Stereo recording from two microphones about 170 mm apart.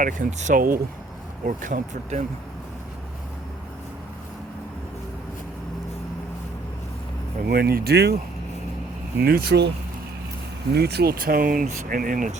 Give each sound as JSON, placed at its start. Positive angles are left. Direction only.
{"t": 0.0, "sound": "speech", "side_deg": -45}
{"t": 7.4, "sound": "speech", "side_deg": -65}
{"t": 9.1, "sound": "speech", "side_deg": -70}